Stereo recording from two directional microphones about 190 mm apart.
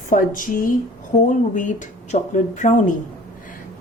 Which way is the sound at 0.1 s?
45° left (ahead or behind).